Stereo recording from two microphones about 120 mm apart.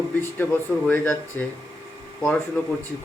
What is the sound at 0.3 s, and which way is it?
Speech, 15° left (ahead or behind).